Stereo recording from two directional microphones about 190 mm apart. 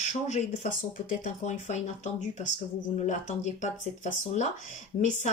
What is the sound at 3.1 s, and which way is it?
Speech, 40° left (ahead or behind).